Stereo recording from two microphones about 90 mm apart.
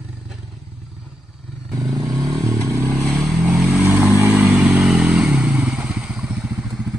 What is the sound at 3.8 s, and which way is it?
Vehicle, 30° right (ahead or behind).